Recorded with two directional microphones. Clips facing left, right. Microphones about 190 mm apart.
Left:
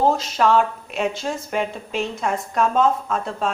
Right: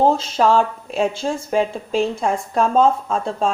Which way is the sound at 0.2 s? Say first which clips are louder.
Right 2 dB; 30° right (ahead or behind).